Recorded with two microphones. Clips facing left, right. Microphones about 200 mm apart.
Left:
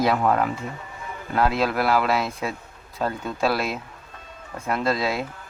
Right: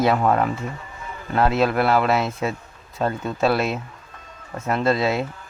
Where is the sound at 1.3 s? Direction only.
Centre (ahead or behind).